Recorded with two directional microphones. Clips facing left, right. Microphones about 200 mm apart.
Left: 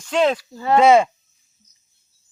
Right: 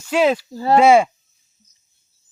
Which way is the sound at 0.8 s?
10° right (ahead or behind).